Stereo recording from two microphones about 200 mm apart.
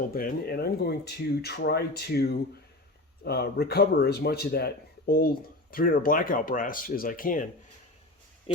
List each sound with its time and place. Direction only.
0.1 s speech: 50° left (ahead or behind)
8.5 s speech: 30° left (ahead or behind)